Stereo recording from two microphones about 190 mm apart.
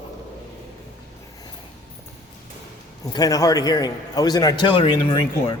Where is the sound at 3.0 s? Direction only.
20° left (ahead or behind).